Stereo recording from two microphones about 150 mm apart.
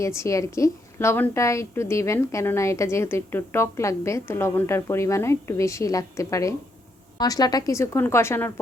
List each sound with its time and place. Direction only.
0.0 s a woman's voice: 20° left (ahead or behind)